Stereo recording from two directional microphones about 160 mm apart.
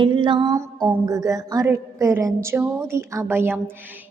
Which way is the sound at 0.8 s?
15° right (ahead or behind).